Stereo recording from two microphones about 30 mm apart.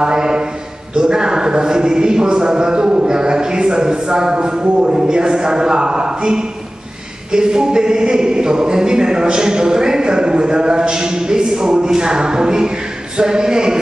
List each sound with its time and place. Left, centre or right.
0.0 s a man's voice: right